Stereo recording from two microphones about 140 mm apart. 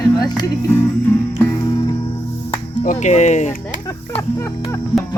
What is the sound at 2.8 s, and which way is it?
Speech, 55° left (ahead or behind).